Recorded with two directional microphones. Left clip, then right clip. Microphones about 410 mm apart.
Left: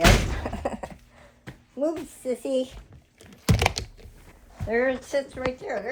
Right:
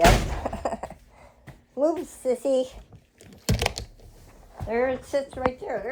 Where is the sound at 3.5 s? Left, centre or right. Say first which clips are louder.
Left 3 dB; centre.